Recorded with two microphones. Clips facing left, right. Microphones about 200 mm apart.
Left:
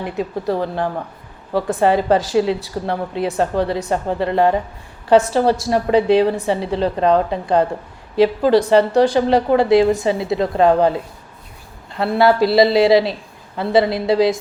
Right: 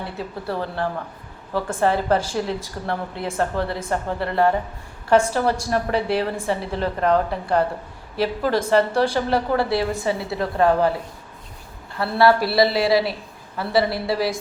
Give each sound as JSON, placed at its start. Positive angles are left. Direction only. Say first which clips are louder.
{"t": 0.0, "sound": "a woman's voice", "louder": "left 7 dB", "side_deg": 15}